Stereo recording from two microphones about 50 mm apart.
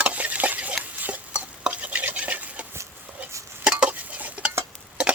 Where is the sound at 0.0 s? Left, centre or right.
Right.